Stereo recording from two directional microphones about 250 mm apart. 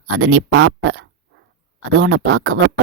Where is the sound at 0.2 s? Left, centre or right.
Right.